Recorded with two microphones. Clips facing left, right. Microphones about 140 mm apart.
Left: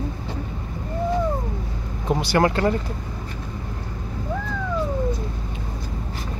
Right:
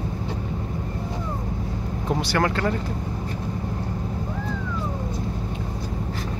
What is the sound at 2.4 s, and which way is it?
Speech, 15° left (ahead or behind).